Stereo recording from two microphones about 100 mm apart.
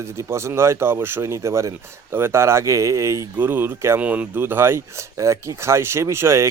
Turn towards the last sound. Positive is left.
turn(degrees=-25)  # may be behind; listen again after turning